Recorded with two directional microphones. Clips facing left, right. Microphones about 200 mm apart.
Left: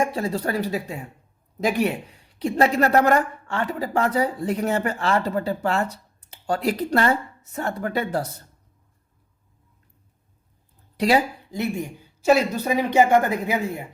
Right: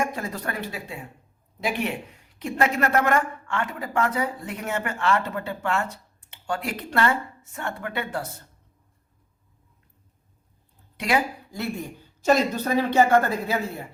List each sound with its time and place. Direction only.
0.0 s speech: 30° left (ahead or behind)
10.9 s speech: 35° left (ahead or behind)
11.5 s speech: 20° left (ahead or behind)